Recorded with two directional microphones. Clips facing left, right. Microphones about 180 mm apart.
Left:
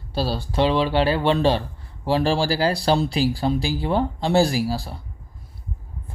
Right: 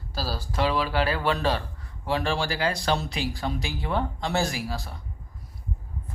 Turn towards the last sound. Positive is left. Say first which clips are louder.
# left 8 dB
turn(degrees=30)  # may be behind; listen again after turning